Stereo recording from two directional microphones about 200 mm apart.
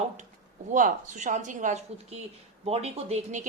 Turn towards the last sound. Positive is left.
turn(degrees=-35)  # may be behind; listen again after turning